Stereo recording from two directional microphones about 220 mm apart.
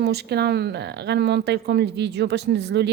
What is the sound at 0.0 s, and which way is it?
Speech, 50° right (ahead or behind).